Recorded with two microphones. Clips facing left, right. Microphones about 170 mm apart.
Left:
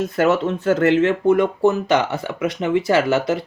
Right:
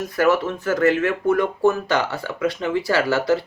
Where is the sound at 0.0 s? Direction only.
25° left (ahead or behind).